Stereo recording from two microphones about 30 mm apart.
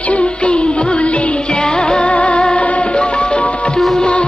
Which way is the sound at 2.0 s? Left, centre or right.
Left.